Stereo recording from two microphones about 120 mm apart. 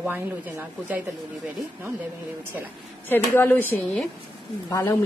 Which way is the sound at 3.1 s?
15° left (ahead or behind).